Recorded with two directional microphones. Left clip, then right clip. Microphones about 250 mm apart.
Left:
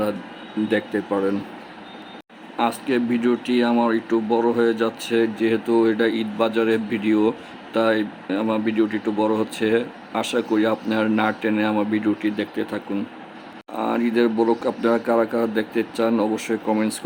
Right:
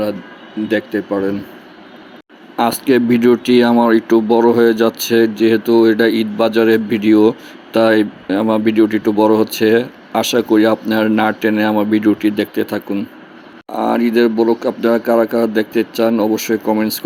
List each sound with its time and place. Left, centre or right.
0.7 s speech: centre
2.6 s speech: centre